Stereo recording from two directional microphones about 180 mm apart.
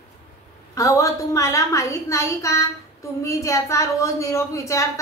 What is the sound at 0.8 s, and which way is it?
A woman's voice, 15° left (ahead or behind).